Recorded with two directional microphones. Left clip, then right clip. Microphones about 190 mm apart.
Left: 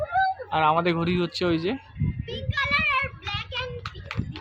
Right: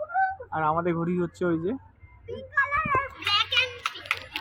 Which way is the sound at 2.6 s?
85° left.